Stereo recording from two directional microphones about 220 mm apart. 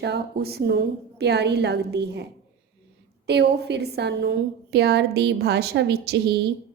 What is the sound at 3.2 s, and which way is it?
A woman's voice, 50° right (ahead or behind).